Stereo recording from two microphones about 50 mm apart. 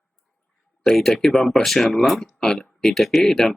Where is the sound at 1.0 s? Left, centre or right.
Centre.